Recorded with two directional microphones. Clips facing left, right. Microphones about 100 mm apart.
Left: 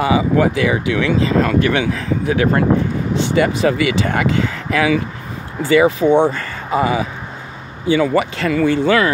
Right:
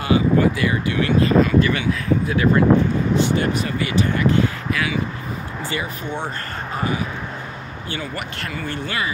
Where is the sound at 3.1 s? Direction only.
90° left.